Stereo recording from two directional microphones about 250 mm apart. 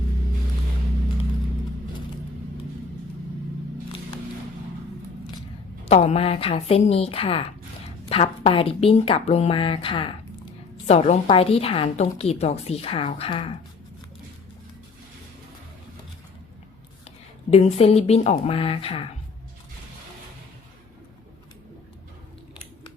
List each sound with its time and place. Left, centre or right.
5.8 s a woman's voice: left
17.5 s a woman's voice: left